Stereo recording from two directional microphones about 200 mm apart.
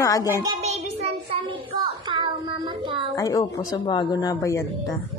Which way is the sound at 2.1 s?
25° right (ahead or behind).